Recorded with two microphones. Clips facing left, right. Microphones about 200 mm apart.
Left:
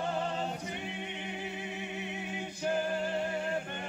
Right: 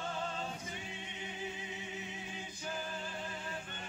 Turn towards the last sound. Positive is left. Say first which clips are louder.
# left 11 dB
turn(degrees=65)  # may be behind; listen again after turning